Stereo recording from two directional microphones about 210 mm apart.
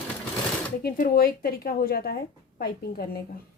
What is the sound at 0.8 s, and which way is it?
Speech, 45° left (ahead or behind).